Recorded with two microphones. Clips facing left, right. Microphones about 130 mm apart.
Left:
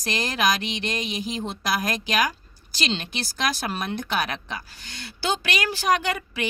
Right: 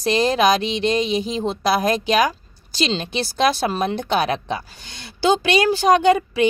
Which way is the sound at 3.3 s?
30° right (ahead or behind).